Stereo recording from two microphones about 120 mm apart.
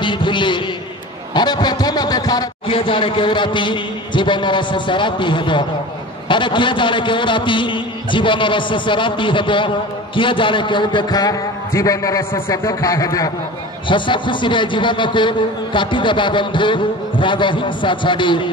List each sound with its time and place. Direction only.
0.0 s a sound: 40° left (ahead or behind)
1.3 s a man's voice: 35° left (ahead or behind)
13.8 s a man's voice: 40° left (ahead or behind)